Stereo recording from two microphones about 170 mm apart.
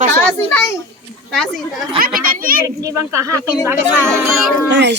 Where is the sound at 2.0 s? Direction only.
60° right (ahead or behind).